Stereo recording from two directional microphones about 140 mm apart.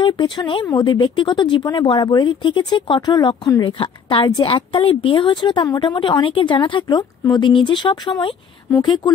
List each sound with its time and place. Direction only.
0.0 s a woman's voice: 35° left (ahead or behind)
3.6 s a woman's voice: 40° left (ahead or behind)
8.6 s speech: 20° left (ahead or behind)